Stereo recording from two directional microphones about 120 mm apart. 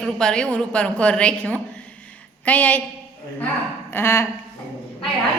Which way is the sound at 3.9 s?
20° left (ahead or behind).